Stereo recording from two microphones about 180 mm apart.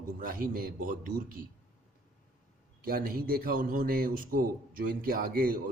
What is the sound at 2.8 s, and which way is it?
A man's voice, 55° right (ahead or behind).